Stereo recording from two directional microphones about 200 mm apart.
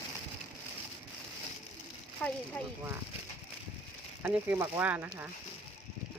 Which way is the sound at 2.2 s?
5° left (ahead or behind).